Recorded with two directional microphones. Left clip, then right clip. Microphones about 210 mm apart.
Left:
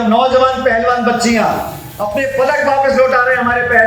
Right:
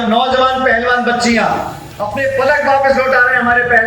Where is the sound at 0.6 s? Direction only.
35° left (ahead or behind).